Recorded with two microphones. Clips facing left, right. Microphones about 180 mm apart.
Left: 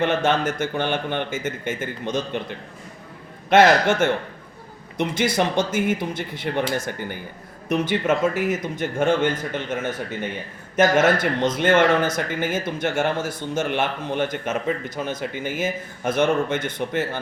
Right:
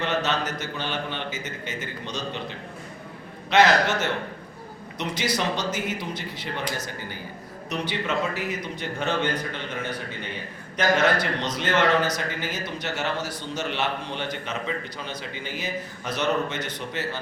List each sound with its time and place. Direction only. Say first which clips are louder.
0.0 s a man's voice: left 6 dB; 50° left (ahead or behind)